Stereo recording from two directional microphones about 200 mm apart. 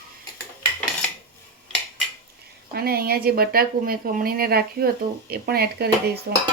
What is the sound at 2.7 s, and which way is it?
Speech, 50° right (ahead or behind).